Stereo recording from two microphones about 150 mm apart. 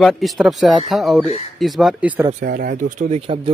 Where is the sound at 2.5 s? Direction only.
80° right; by 3.2 s 60° right (ahead or behind).